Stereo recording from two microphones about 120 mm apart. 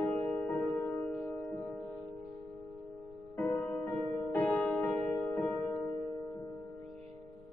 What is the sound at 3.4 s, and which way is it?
Music, 15° left (ahead or behind).